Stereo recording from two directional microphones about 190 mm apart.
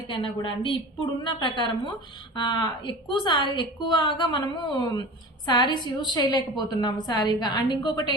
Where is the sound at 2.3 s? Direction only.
25° left (ahead or behind).